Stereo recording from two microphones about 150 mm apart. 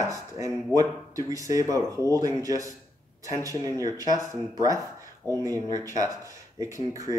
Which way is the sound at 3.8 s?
25° right (ahead or behind).